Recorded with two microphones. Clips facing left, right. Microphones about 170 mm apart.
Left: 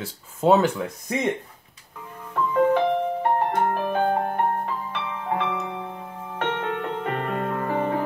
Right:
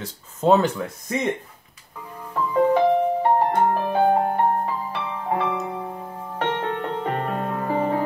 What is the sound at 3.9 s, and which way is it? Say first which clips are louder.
Music: right 5 dB; 15° right (ahead or behind).